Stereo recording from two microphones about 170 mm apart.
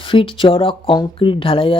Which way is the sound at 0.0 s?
30° left (ahead or behind).